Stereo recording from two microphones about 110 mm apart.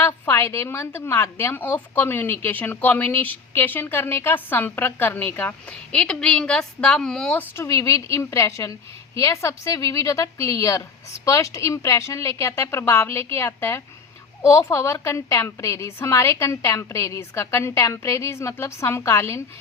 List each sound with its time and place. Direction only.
0.0 s a woman's voice: 25° left (ahead or behind); by 7.3 s 5° left (ahead or behind)
7.5 s a woman's voice: 25° left (ahead or behind)